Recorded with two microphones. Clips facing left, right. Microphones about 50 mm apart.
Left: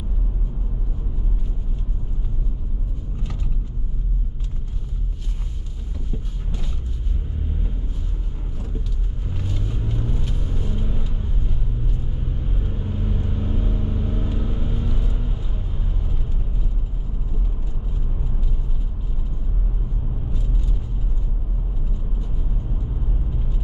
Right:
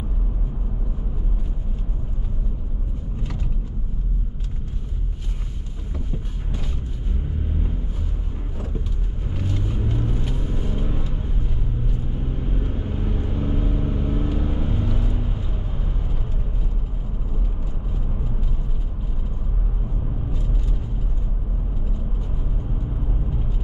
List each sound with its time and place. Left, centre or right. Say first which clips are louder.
9.3 s vehicle: right 2 dB; centre
12.4 s vehicle: right 3 dB; right